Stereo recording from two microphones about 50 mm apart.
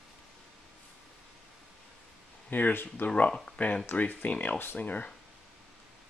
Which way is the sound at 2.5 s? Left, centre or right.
Left.